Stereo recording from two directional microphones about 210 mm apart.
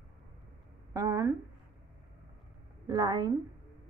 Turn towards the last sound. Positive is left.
turn(degrees=-20)  # may be behind; listen again after turning